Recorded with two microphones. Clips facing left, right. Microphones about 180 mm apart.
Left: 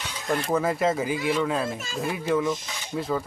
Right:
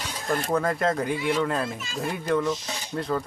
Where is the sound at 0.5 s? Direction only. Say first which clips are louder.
Left 1 dB; 5° left (ahead or behind).